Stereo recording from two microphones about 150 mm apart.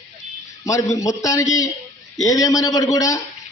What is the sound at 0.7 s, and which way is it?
A man's voice, 20° left (ahead or behind).